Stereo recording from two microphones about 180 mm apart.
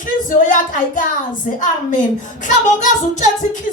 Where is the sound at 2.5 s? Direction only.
40° left (ahead or behind).